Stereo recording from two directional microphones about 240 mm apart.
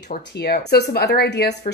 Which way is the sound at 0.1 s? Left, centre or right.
Left.